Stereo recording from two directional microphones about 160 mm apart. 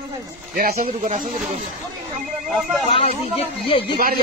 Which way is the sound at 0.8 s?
50° right (ahead or behind).